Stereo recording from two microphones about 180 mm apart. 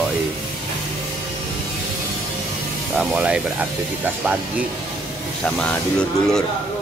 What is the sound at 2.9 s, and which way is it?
Speech, 5° right (ahead or behind).